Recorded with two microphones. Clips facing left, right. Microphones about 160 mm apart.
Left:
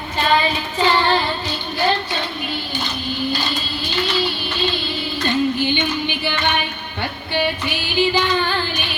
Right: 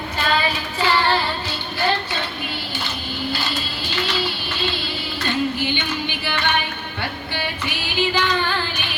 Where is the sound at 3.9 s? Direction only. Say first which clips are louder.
Left 3 dB; 15° left (ahead or behind).